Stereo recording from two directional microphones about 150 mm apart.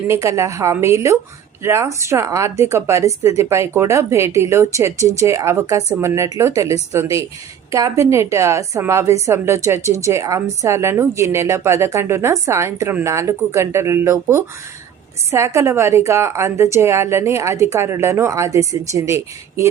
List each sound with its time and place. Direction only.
0.1 s a woman's voice: 20° right (ahead or behind)